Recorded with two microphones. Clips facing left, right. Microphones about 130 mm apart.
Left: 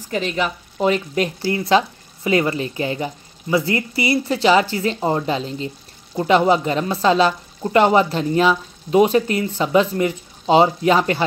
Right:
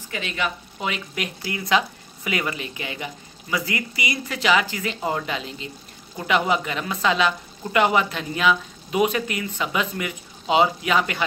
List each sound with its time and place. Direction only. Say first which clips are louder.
0.1 s speech: left 6 dB; 40° left (ahead or behind)